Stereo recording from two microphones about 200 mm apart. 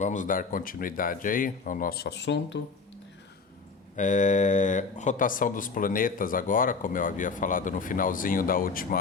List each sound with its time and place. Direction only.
0.0 s speech: 40° left (ahead or behind); by 2.6 s 60° left (ahead or behind)
3.9 s speech: 40° left (ahead or behind)